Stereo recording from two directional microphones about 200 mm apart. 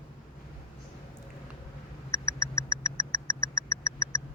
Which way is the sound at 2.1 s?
15° left (ahead or behind).